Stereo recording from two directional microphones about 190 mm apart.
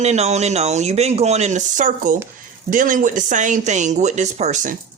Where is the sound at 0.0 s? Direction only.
35° right (ahead or behind).